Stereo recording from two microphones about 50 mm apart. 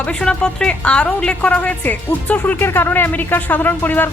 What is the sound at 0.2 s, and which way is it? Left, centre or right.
A woman's voice, centre.